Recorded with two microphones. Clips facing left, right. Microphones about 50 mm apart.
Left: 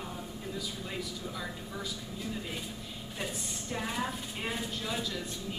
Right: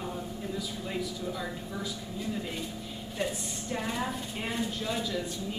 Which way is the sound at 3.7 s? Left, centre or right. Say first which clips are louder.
Right 2 dB; centre.